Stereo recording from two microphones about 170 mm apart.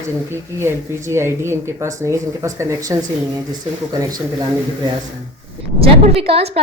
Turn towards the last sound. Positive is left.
turn(degrees=-35)  # may be behind; listen again after turning